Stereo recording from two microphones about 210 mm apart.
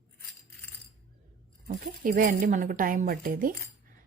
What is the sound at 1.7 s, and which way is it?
A woman's voice, 40° right (ahead or behind).